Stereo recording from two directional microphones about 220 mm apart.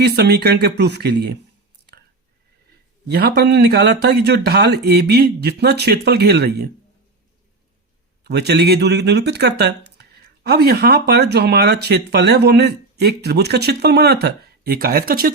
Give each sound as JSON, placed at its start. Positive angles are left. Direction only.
{"t": 0.0, "sound": "speech", "side_deg": -45}
{"t": 3.1, "sound": "speech", "side_deg": -50}
{"t": 8.2, "sound": "speech", "side_deg": -50}